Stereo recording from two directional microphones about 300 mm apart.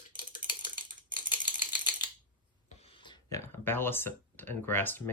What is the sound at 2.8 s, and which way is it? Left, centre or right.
Speech, centre.